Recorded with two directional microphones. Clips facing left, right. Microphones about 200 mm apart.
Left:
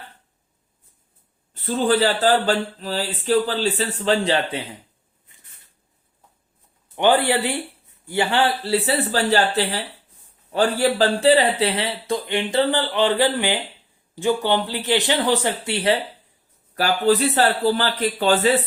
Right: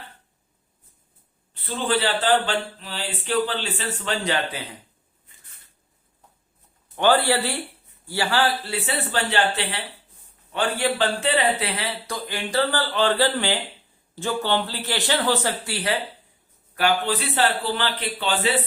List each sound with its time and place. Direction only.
1.5 s speech: 40° left (ahead or behind)
6.9 s a man's voice: 15° left (ahead or behind)
16.7 s speech: 40° left (ahead or behind)